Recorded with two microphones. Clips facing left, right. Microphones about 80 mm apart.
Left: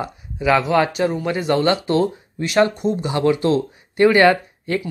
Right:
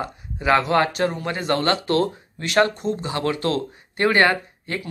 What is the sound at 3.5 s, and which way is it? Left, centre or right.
Speech, right.